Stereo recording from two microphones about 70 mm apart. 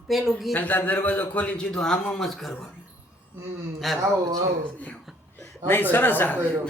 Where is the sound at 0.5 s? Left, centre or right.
Left; by 2.5 s centre.